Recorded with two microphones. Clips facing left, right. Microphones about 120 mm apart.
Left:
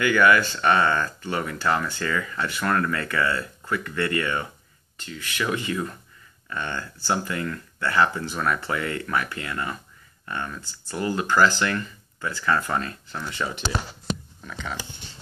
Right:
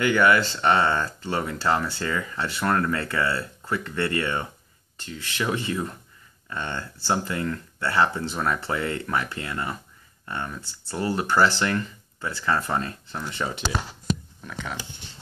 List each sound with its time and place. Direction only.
0.0 s speech: 30° right (ahead or behind)
14.4 s speech: 5° right (ahead or behind)